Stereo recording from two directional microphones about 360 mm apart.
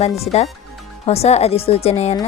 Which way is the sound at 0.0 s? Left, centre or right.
Centre.